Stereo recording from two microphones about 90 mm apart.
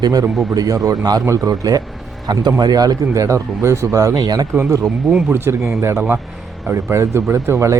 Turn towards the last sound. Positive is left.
turn(degrees=-35)  # may be behind; listen again after turning